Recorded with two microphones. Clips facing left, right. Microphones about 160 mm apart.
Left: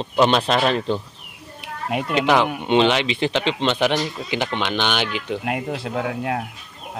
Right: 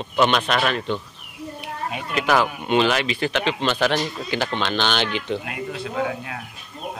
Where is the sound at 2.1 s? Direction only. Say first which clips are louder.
Left 2 dB; 25° left (ahead or behind).